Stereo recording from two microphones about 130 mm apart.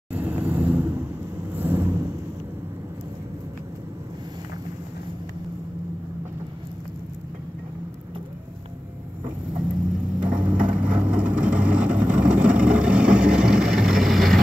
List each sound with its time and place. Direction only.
0.1 s vehicle: 15° right (ahead or behind)
9.9 s vehicle: 10° right (ahead or behind)